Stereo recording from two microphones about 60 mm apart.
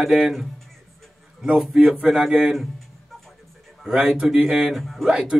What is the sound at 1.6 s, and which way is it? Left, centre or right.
Speech, centre.